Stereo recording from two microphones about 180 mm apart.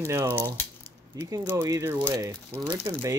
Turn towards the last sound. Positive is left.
turn(degrees=-20)  # may be behind; listen again after turning